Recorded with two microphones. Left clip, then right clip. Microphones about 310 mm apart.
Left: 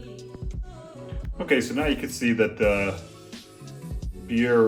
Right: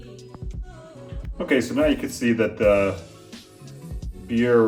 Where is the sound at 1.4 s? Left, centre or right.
Centre.